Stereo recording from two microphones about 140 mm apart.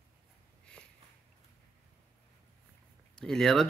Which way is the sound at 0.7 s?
5° left (ahead or behind).